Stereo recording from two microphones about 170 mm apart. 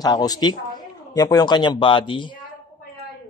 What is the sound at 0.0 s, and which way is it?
Speech, 20° left (ahead or behind).